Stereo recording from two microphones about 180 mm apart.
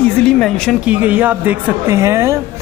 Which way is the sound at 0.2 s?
5° left (ahead or behind).